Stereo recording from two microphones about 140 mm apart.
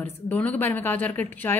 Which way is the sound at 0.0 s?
10° left (ahead or behind).